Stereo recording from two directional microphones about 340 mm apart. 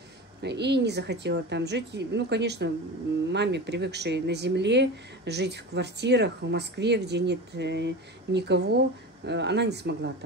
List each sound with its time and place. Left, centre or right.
0.4 s speech: right